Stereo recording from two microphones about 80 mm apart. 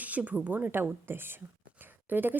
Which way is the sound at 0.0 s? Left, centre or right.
Centre.